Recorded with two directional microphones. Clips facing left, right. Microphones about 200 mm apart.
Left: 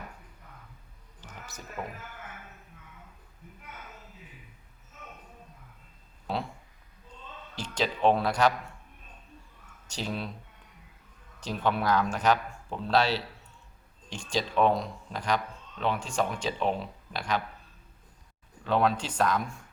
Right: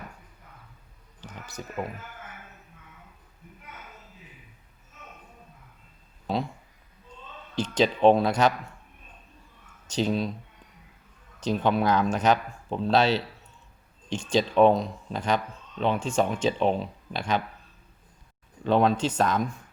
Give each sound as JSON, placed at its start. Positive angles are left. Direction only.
{"t": 1.8, "sound": "speech", "side_deg": -15}
{"t": 7.5, "sound": "speech", "side_deg": -20}
{"t": 9.8, "sound": "a sound", "side_deg": -20}
{"t": 11.3, "sound": "speech", "side_deg": -20}
{"t": 18.6, "sound": "speech", "side_deg": -25}